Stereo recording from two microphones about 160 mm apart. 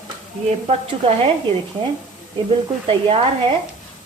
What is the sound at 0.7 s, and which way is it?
Speech, 35° right (ahead or behind).